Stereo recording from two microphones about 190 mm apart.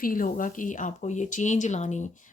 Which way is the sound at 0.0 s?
45° left (ahead or behind).